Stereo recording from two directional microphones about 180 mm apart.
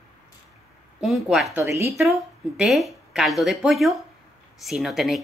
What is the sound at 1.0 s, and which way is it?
Speech, centre (ahead or behind).